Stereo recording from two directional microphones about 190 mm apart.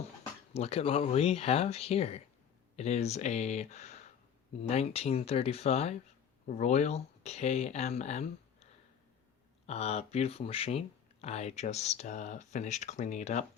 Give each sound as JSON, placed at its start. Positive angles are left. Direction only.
{"t": 0.5, "sound": "speech", "side_deg": 30}
{"t": 9.6, "sound": "speech", "side_deg": 35}